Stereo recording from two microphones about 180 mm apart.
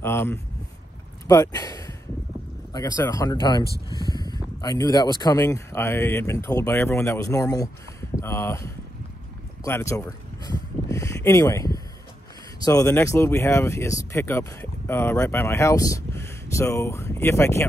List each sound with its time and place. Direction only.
0.0 s speech: 15° left (ahead or behind)